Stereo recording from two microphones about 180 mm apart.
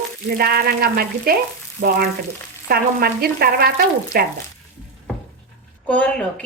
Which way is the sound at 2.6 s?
60° right (ahead or behind).